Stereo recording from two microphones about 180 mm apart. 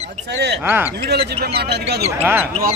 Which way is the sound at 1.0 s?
65° right (ahead or behind).